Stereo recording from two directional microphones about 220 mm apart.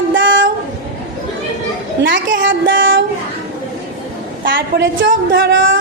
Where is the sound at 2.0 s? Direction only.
55° right (ahead or behind).